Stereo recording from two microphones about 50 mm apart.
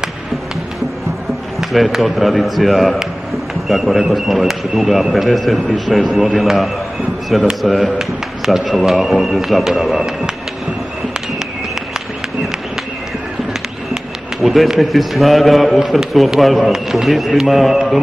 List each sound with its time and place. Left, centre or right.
1.6 s a sound: centre
1.9 s a man's voice: centre
9.9 s speech: centre
14.4 s a man's voice: centre